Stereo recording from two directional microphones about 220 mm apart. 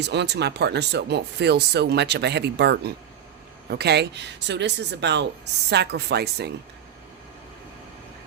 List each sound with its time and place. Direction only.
0.0 s speech: 50° right (ahead or behind)